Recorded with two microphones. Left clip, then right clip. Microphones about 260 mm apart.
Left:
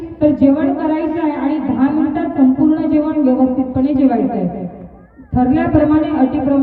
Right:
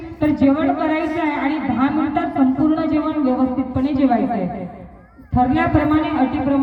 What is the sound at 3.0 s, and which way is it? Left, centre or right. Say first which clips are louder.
Speech: left 5 dB; right.